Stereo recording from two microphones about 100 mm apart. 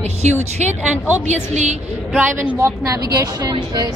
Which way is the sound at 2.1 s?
20° right (ahead or behind).